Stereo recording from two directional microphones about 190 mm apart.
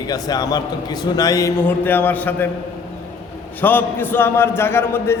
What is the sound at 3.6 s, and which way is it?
A man's voice, 10° left (ahead or behind).